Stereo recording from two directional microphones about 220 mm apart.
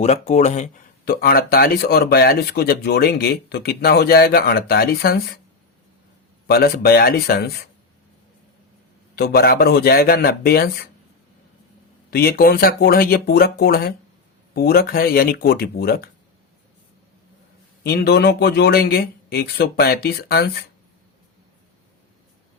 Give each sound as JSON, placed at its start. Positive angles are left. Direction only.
{"t": 0.0, "sound": "speech", "side_deg": 30}
{"t": 6.5, "sound": "speech", "side_deg": 45}
{"t": 9.1, "sound": "speech", "side_deg": 45}
{"t": 12.1, "sound": "speech", "side_deg": 45}
{"t": 17.8, "sound": "speech", "side_deg": 45}